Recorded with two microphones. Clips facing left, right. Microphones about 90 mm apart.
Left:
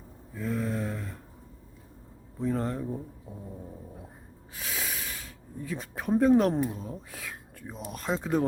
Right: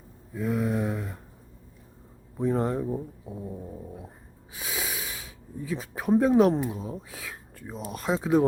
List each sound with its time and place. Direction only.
0.3 s mantra: 10° right (ahead or behind)
2.4 s speech: 15° right (ahead or behind)
4.5 s a sound: centre (ahead or behind)
6.7 s speech: 5° right (ahead or behind)